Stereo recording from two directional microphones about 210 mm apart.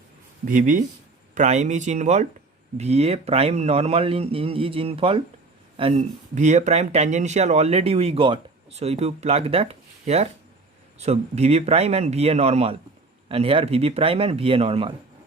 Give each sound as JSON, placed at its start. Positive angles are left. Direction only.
{"t": 0.4, "sound": "a man's voice", "side_deg": -40}